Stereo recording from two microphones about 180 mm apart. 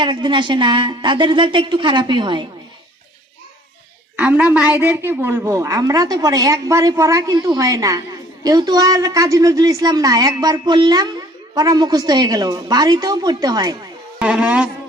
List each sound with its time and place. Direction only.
0.0 s a woman's voice: 25° right (ahead or behind)
4.2 s a woman's voice: 5° right (ahead or behind)
14.2 s speech: 5° right (ahead or behind)